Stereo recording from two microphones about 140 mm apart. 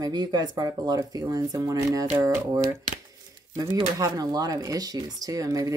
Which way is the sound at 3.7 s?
25° right (ahead or behind).